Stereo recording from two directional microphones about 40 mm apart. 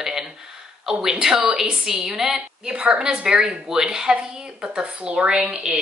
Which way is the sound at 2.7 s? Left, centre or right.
Right.